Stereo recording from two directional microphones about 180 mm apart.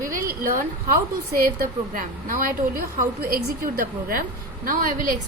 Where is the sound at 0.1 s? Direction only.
55° right (ahead or behind).